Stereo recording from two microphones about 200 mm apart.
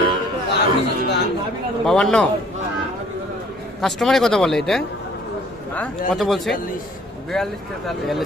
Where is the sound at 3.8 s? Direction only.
Centre (ahead or behind).